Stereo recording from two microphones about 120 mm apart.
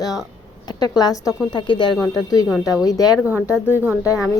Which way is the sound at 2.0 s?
30° left (ahead or behind).